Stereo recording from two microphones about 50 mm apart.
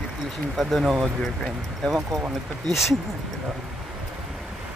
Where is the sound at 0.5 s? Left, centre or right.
Centre.